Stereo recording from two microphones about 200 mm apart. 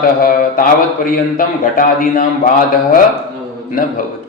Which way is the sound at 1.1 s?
45° left (ahead or behind).